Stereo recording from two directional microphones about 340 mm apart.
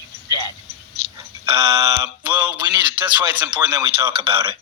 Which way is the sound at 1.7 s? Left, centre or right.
Centre.